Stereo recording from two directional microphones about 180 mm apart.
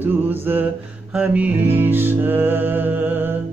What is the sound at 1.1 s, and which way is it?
Speech, 10° right (ahead or behind).